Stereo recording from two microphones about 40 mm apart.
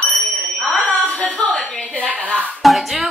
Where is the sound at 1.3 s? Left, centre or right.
Left.